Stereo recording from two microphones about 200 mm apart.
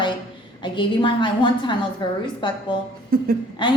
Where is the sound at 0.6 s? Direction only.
25° left (ahead or behind).